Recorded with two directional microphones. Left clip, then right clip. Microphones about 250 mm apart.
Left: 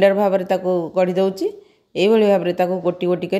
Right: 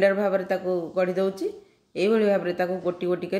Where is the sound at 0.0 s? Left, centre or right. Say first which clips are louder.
Left 6 dB; left.